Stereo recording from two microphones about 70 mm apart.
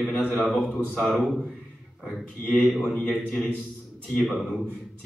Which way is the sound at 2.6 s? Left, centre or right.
Centre.